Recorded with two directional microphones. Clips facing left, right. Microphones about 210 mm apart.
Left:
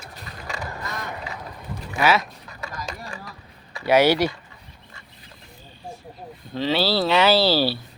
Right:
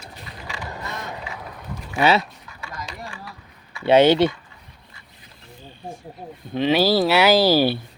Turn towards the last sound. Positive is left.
turn(degrees=-15)  # may be behind; listen again after turning